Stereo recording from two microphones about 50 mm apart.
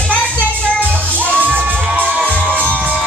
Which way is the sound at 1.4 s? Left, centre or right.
Right.